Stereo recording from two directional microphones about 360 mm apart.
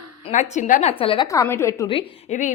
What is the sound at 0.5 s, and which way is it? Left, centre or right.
A woman's voice, centre.